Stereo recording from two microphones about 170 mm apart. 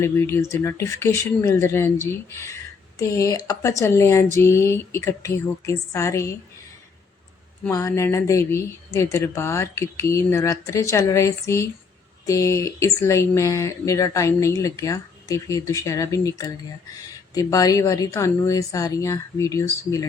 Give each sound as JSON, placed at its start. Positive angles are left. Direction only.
{"t": 0.0, "sound": "speech", "side_deg": 15}
{"t": 7.7, "sound": "speech", "side_deg": 20}